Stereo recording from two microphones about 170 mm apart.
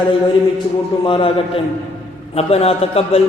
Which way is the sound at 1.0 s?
30° left (ahead or behind).